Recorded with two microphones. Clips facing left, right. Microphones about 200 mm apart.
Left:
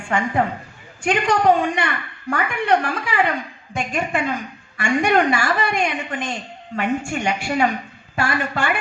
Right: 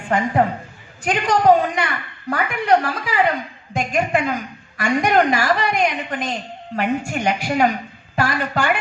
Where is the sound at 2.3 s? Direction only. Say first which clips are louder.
Right 2 dB; 40° right (ahead or behind).